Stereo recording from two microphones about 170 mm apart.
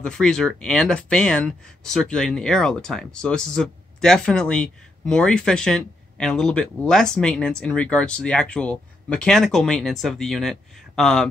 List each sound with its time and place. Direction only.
0.0 s speech: 5° left (ahead or behind)